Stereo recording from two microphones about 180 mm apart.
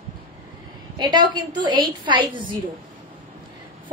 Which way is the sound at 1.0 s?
25° right (ahead or behind).